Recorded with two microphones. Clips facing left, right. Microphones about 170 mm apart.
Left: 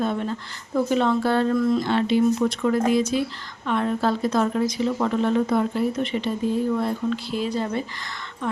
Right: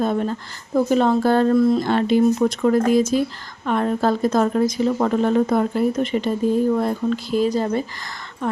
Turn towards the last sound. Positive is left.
turn(degrees=-40)  # may be behind; listen again after turning